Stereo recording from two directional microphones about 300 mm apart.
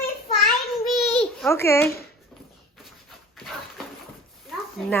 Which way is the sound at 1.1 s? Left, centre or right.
Centre.